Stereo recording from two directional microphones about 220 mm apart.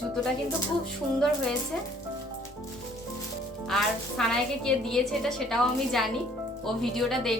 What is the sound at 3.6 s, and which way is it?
A woman's voice, centre (ahead or behind).